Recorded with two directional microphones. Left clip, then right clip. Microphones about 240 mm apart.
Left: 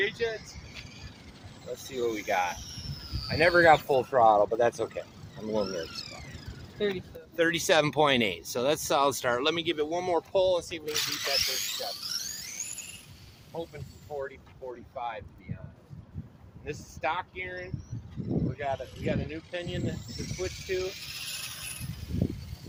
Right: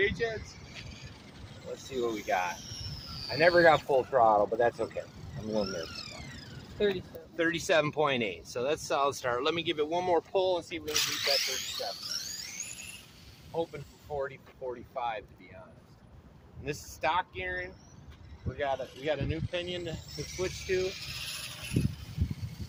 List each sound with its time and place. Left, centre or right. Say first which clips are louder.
0.0 s speech: even; left
1.6 s speech: left 2 dB; centre
2.5 s a sound: left 1 dB; centre
3.8 s speech: left 2 dB; left
5.3 s vehicle: left 2 dB; centre
6.7 s speech: right 1 dB; centre
7.3 s speech: left 3 dB; left
10.8 s speech: even; centre
11.2 s a sound: left 1 dB; centre
14.1 s speech: right 1 dB; right
16.6 s speech: even; right
18.5 s speech: even; right
20.1 s a sound: even; centre